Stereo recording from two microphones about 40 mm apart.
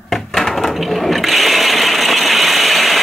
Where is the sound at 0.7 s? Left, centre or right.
Centre.